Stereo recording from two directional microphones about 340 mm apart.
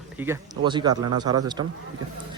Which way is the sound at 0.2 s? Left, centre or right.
Centre.